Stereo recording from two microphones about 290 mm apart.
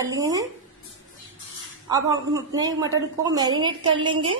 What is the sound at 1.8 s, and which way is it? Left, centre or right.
A woman's voice, centre.